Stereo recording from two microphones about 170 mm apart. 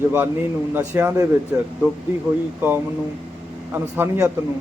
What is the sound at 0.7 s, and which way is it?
Speech, 10° right (ahead or behind).